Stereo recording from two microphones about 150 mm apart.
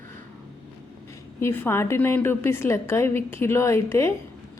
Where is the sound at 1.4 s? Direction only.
15° left (ahead or behind).